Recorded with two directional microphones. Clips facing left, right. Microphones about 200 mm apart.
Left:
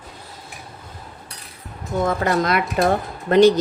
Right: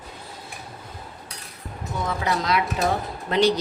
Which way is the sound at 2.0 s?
50° left (ahead or behind).